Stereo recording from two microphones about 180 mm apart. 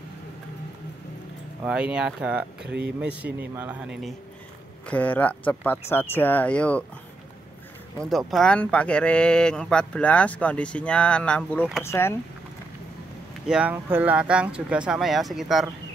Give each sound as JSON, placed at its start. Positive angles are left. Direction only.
{"t": 1.6, "sound": "speech", "side_deg": -5}
{"t": 2.6, "sound": "speech", "side_deg": -70}
{"t": 3.0, "sound": "speech", "side_deg": -5}
{"t": 4.8, "sound": "speech", "side_deg": 10}
{"t": 8.0, "sound": "speech", "side_deg": 0}
{"t": 13.5, "sound": "speech", "side_deg": -5}